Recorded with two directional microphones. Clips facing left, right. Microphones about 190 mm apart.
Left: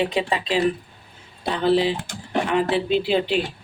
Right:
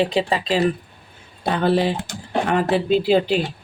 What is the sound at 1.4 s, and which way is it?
Speech, 50° right (ahead or behind).